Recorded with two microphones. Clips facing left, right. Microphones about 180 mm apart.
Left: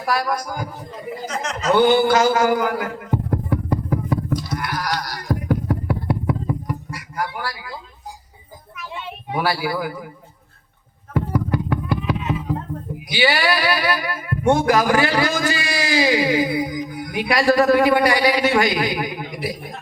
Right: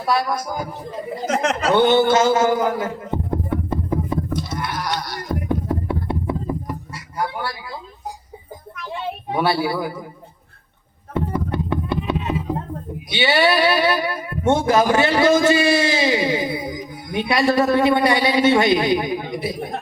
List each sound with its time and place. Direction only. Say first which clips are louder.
0.0 s speech: right 1 dB; 25° right (ahead or behind)
1.3 s speech: right 10 dB; 60° right (ahead or behind)
1.7 s a sound: left 1 dB; 25° right (ahead or behind)
9.4 s speech: right 2 dB; 25° right (ahead or behind)
11.1 s a sound: left 1 dB; 25° right (ahead or behind)
13.1 s speech: right 2 dB; 25° right (ahead or behind)